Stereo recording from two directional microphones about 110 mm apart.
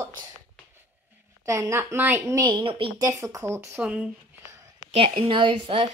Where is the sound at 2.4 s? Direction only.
40° right (ahead or behind).